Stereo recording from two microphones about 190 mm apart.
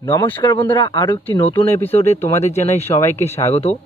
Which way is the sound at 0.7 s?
25° left (ahead or behind).